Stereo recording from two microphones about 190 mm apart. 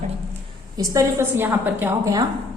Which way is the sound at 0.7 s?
20° right (ahead or behind).